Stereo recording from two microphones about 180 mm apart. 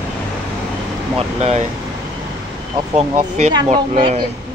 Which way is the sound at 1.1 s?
40° right (ahead or behind).